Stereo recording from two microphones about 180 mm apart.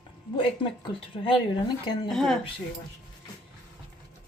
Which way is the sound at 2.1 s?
Centre (ahead or behind).